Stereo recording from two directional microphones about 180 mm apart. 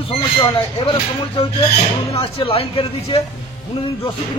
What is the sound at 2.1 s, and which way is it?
A man's voice, 30° left (ahead or behind).